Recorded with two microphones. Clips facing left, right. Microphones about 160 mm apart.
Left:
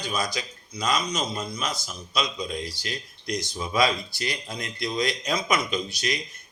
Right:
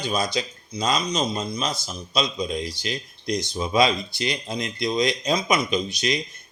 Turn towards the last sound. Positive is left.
turn(degrees=-20)  # may be behind; listen again after turning